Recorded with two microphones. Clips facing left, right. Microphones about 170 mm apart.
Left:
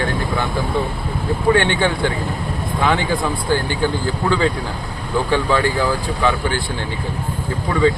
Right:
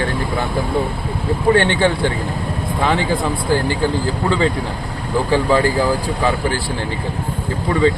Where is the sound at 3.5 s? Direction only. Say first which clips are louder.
Right 2 dB; 30° right (ahead or behind).